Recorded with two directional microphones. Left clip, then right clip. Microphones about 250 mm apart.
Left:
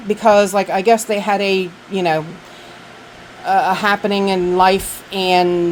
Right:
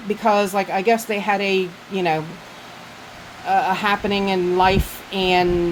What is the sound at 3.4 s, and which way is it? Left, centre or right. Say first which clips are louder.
Speech: left 4 dB; left.